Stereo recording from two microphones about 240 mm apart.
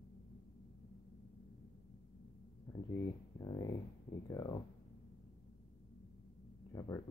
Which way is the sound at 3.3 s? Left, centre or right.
Centre.